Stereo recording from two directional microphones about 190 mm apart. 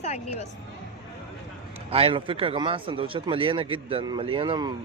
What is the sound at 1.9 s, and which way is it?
Speech, 30° right (ahead or behind).